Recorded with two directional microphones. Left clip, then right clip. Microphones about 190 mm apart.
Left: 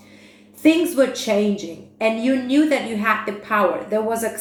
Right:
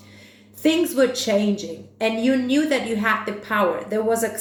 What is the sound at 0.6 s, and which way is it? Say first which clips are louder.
A woman's voice: left 2 dB; 35° right (ahead or behind).